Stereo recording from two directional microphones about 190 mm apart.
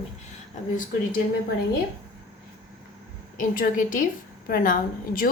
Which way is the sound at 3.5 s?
45° left (ahead or behind).